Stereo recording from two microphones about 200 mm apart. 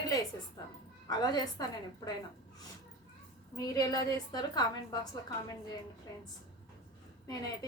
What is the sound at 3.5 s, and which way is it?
A woman's voice, 20° left (ahead or behind).